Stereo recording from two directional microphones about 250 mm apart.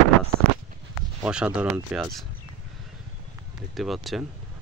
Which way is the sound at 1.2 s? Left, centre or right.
Centre.